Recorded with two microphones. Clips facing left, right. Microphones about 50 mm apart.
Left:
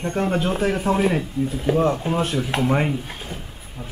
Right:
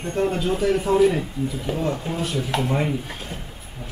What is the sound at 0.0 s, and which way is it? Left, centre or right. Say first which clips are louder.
Speech: left 1 dB; left.